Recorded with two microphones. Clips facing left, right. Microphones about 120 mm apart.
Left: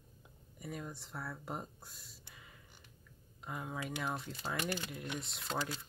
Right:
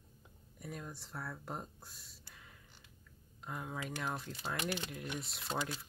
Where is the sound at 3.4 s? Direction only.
Centre (ahead or behind).